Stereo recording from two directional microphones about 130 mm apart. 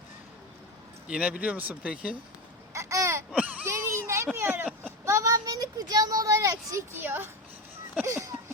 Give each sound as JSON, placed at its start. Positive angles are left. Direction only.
{"t": 1.0, "sound": "speech", "side_deg": -10}
{"t": 2.7, "sound": "speech", "side_deg": -25}
{"t": 3.3, "sound": "a sound", "side_deg": -10}
{"t": 4.4, "sound": "speech", "side_deg": -15}